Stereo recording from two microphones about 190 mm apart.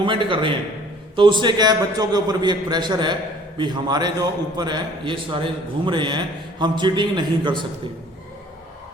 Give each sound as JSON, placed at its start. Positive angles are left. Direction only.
{"t": 0.0, "sound": "a man's voice", "side_deg": -25}